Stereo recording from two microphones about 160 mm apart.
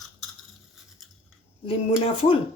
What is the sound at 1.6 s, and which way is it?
Speech, 35° left (ahead or behind).